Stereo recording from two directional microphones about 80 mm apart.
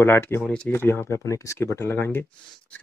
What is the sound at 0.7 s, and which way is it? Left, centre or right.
Speech, left.